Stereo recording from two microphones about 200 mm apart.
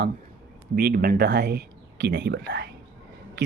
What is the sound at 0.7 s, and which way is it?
Speech, 50° right (ahead or behind).